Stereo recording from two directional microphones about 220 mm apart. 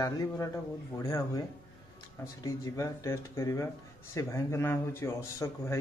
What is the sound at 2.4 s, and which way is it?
A man's voice, 15° left (ahead or behind).